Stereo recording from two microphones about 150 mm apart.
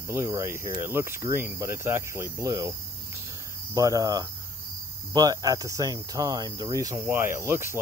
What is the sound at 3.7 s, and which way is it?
Speech, 25° right (ahead or behind).